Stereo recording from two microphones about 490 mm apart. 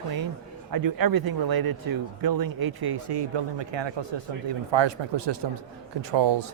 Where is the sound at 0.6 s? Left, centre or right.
Right.